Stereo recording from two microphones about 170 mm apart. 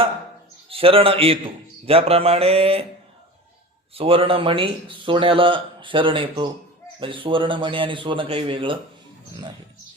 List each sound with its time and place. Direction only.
0.7 s speech: 35° right (ahead or behind)
3.9 s speech: 35° right (ahead or behind)